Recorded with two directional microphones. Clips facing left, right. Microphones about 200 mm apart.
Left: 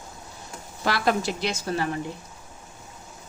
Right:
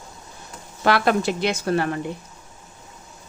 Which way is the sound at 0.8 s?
60° right (ahead or behind).